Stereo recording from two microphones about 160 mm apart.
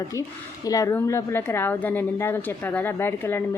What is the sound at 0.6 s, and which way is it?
A woman's voice, 20° left (ahead or behind).